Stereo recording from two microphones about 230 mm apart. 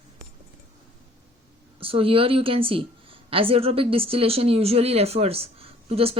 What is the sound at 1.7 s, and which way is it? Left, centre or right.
A woman's voice, right.